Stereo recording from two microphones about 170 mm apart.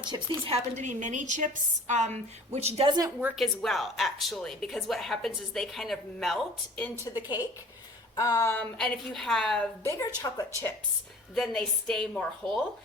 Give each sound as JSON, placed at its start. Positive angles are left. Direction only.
{"t": 0.0, "sound": "a woman's voice", "side_deg": -25}
{"t": 0.5, "sound": "a woman's voice", "side_deg": -45}
{"t": 3.2, "sound": "a woman's voice", "side_deg": -10}
{"t": 3.4, "sound": "a woman's voice", "side_deg": 0}
{"t": 7.0, "sound": "speech", "side_deg": 25}
{"t": 8.8, "sound": "a woman's voice", "side_deg": 5}
{"t": 10.2, "sound": "speech", "side_deg": 20}
{"t": 11.3, "sound": "a woman's voice", "side_deg": 0}